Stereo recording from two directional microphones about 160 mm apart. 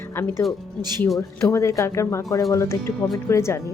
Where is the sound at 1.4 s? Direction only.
20° left (ahead or behind).